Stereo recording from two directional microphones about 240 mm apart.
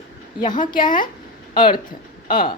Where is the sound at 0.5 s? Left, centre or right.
Centre.